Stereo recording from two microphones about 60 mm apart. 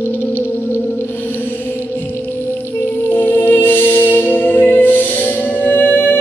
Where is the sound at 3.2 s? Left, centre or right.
Left.